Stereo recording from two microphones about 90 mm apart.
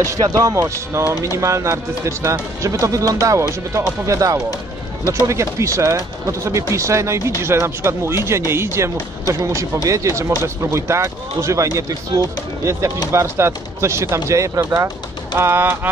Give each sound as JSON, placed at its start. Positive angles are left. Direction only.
{"t": 0.0, "sound": "speech", "side_deg": -40}
{"t": 8.5, "sound": "bird", "side_deg": -30}
{"t": 9.8, "sound": "speech", "side_deg": -35}
{"t": 15.3, "sound": "bird", "side_deg": -25}